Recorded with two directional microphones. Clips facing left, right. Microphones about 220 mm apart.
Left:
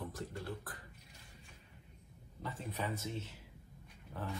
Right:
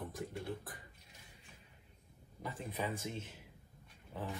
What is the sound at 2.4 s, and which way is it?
Speech, 15° right (ahead or behind).